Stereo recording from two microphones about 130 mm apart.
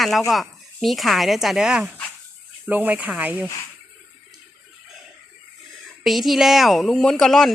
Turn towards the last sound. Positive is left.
turn(degrees=0)  # may be behind; listen again after turning